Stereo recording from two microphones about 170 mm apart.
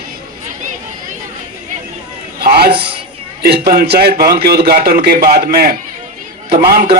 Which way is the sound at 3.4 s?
65° right (ahead or behind).